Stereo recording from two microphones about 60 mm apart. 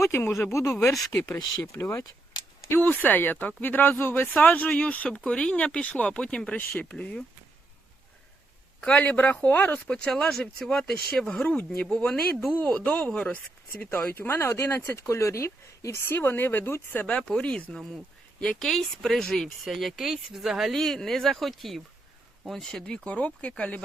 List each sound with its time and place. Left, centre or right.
0.1 s speech: left
2.8 s speech: left
9.0 s speech: left
9.8 s speech: centre
11.4 s speech: left
12.5 s speech: left
15.1 s speech: left
16.1 s speech: left
17.2 s speech: centre
20.7 s speech: centre
23.0 s speech: left